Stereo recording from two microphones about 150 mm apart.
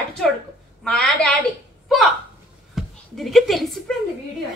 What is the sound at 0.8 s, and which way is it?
Speech, 5° left (ahead or behind).